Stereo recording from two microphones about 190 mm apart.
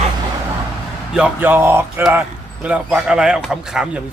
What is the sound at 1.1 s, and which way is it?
Speech, 10° right (ahead or behind).